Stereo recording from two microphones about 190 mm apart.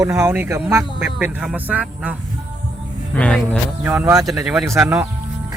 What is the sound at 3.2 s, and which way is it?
Speech, 5° left (ahead or behind).